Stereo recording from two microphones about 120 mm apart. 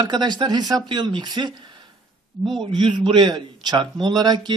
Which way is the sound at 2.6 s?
40° right (ahead or behind).